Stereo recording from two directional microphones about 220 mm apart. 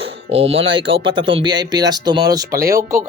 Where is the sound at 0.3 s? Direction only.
25° right (ahead or behind).